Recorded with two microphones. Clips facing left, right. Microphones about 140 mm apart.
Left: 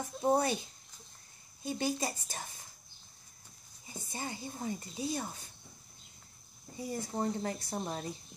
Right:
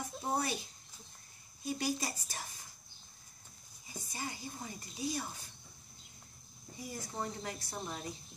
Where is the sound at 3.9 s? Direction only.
25° left (ahead or behind).